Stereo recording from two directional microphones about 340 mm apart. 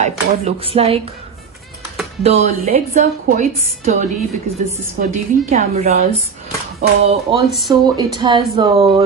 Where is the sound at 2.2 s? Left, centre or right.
Centre.